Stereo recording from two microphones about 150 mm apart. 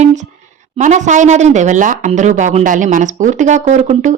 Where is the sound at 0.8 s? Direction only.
55° right (ahead or behind).